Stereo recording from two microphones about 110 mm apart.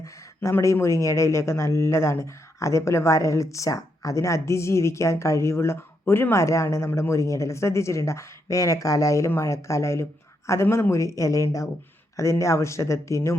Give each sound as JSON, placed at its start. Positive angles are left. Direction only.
{"t": 0.0, "sound": "speech", "side_deg": 25}